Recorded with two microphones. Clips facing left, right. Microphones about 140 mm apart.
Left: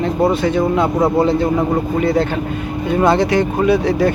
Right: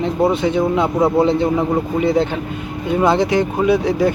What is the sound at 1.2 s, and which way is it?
Speech, 20° right (ahead or behind).